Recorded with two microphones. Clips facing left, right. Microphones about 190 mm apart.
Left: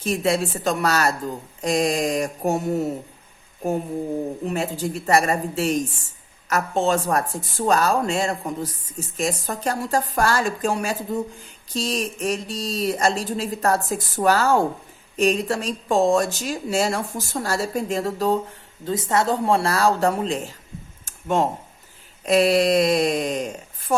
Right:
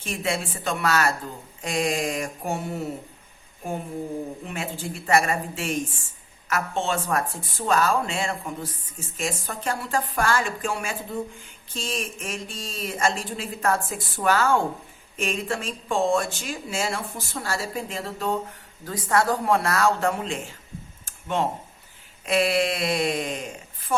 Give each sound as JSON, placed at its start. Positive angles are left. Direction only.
{"t": 0.0, "sound": "speech", "side_deg": 40}
{"t": 4.4, "sound": "speech", "side_deg": 40}
{"t": 18.9, "sound": "speech", "side_deg": 25}
{"t": 21.0, "sound": "a sound", "side_deg": 45}
{"t": 22.3, "sound": "speech", "side_deg": 40}